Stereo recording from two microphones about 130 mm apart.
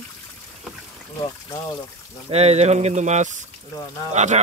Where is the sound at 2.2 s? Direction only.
55° right (ahead or behind).